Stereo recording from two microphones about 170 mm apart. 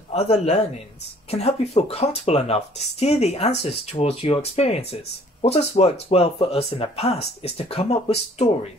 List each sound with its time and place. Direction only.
0.1 s speech: 40° left (ahead or behind)